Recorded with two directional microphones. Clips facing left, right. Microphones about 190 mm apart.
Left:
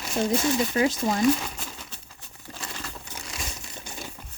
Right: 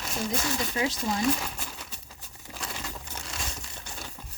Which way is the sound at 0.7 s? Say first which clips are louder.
Left 6 dB; 55° left (ahead or behind).